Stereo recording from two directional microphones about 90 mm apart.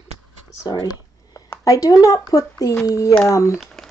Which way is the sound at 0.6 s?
45° left (ahead or behind).